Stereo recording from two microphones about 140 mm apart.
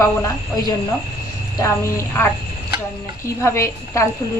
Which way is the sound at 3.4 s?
20° left (ahead or behind).